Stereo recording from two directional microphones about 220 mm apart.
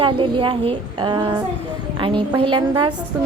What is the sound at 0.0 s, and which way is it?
Speech, 25° right (ahead or behind).